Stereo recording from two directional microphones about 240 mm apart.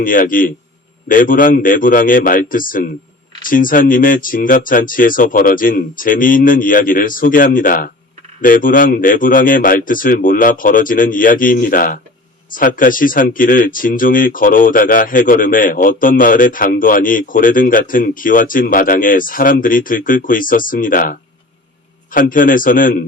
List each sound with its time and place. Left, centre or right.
0.0 s speech: left